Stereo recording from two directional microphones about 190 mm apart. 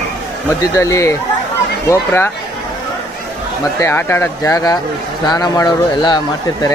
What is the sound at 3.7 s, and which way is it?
Speech, 10° left (ahead or behind).